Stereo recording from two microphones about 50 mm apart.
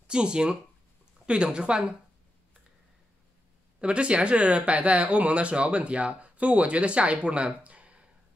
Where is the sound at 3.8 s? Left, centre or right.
Right.